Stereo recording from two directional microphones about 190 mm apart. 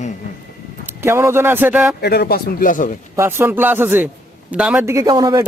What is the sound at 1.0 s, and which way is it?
Speech, 15° right (ahead or behind).